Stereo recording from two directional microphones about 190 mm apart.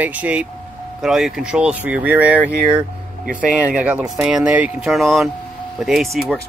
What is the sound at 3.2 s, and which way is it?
Speech, 45° right (ahead or behind).